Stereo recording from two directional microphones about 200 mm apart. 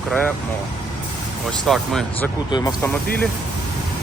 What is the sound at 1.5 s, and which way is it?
Speech, centre (ahead or behind).